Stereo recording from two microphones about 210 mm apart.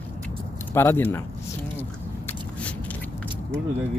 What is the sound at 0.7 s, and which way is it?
Speech, 10° left (ahead or behind).